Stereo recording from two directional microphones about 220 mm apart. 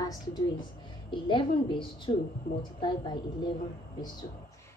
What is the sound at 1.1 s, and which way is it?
A woman's voice, 20° left (ahead or behind).